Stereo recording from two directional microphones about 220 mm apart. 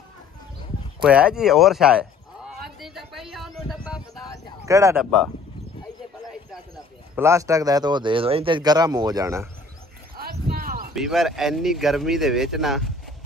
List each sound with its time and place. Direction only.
1.0 s speech: 5° right (ahead or behind)
2.8 s a sound: centre (ahead or behind)
4.6 s speech: 15° right (ahead or behind)
7.2 s speech: 15° right (ahead or behind)
10.1 s a sound: 45° right (ahead or behind)
11.0 s speech: centre (ahead or behind)